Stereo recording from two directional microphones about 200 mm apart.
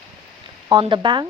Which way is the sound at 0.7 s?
25° right (ahead or behind).